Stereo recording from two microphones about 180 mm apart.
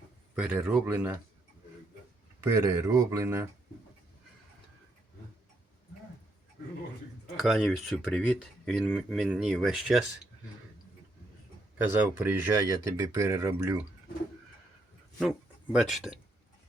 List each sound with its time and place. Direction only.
0.3 s speech: 5° right (ahead or behind)
2.4 s speech: 15° right (ahead or behind)
7.3 s speech: centre (ahead or behind)
11.9 s speech: 10° right (ahead or behind)
15.2 s speech: centre (ahead or behind)